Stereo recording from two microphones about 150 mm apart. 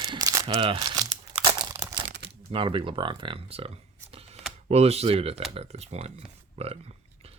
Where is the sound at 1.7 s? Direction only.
15° right (ahead or behind).